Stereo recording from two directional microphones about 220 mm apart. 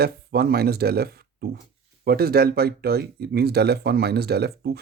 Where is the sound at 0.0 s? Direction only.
45° right (ahead or behind).